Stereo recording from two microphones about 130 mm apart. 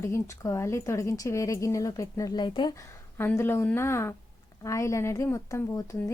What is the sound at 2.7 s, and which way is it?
Speech, 20° left (ahead or behind).